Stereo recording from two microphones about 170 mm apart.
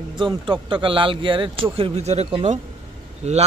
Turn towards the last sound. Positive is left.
turn(degrees=-40)  # may be behind; listen again after turning